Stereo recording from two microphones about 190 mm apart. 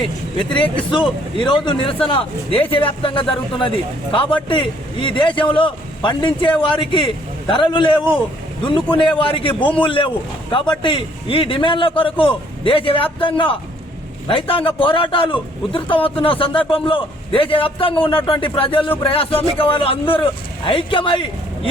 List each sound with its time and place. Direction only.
0.3 s a man's voice: 25° left (ahead or behind)